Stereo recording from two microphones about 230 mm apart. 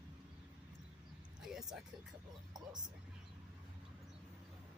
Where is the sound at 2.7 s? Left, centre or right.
Centre.